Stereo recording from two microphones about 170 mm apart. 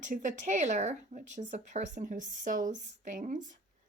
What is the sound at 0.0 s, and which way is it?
Speech, 50° right (ahead or behind).